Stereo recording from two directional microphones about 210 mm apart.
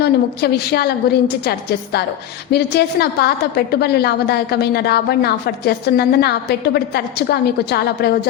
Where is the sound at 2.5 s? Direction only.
50° left (ahead or behind).